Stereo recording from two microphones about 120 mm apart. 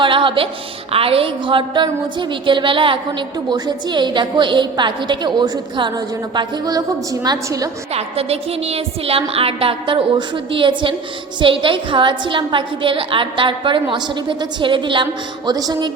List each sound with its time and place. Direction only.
0.0 s a woman's voice: 45° right (ahead or behind); by 7.7 s 30° right (ahead or behind)
7.9 s a woman's voice: 55° right (ahead or behind)
15.4 s a woman's voice: 35° right (ahead or behind)